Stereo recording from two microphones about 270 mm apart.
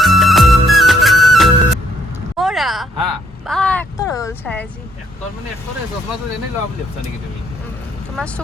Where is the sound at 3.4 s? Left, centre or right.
Centre.